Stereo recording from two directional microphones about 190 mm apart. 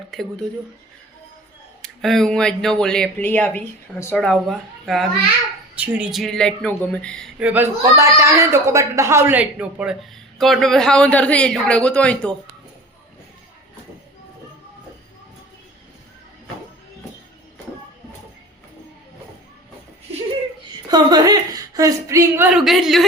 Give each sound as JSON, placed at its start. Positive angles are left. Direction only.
{"t": 1.8, "sound": "speech", "side_deg": 0}
{"t": 20.9, "sound": "speech", "side_deg": -20}
{"t": 22.5, "sound": "speech", "side_deg": 0}